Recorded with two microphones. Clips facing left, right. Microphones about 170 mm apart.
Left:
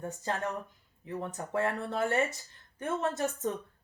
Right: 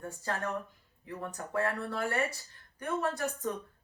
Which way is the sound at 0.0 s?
20° left (ahead or behind).